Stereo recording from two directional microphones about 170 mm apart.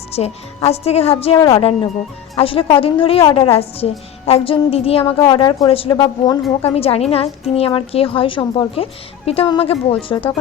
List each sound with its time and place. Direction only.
0.1 s a woman's voice: 35° left (ahead or behind)
6.6 s a woman's voice: 35° left (ahead or behind)